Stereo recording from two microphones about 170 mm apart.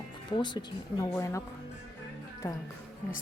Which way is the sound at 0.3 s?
25° left (ahead or behind).